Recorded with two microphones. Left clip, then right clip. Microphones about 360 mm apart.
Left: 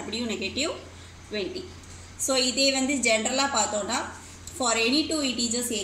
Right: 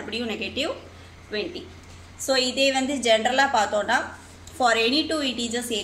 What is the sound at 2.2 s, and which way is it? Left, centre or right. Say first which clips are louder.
A woman's voice: right 2 dB; right.